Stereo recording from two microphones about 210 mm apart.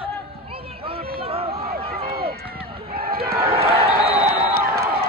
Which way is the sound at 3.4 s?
30° right (ahead or behind).